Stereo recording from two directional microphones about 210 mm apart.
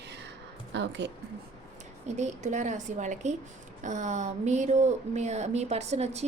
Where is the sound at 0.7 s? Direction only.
55° right (ahead or behind).